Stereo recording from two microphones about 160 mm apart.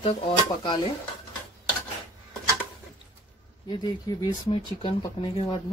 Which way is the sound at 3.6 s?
30° left (ahead or behind).